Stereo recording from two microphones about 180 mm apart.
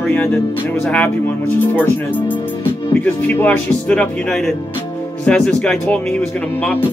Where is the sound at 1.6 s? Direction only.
10° left (ahead or behind).